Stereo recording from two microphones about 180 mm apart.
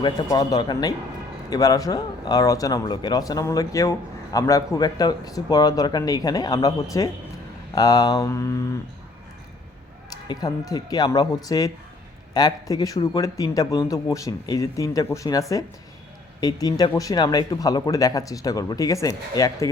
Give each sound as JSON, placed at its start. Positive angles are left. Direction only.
{"t": 0.0, "sound": "speech", "side_deg": 20}
{"t": 10.1, "sound": "speech", "side_deg": 20}